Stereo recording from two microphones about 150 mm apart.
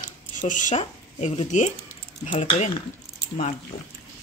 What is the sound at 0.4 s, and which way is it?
Speech, 60° left (ahead or behind).